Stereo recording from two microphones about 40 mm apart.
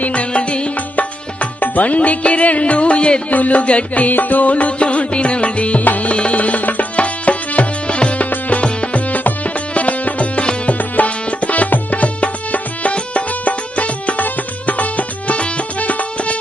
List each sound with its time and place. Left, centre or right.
0.0 s music: left
0.9 s music: left
8.3 s music: left